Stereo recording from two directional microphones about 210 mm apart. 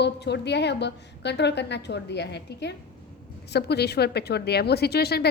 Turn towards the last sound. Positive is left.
turn(degrees=50)  # may be behind; listen again after turning